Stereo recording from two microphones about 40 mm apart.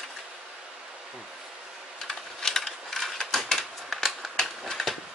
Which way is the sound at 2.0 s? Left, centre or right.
Centre.